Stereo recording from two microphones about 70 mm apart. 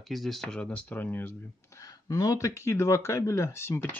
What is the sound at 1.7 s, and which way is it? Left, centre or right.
Speech, left.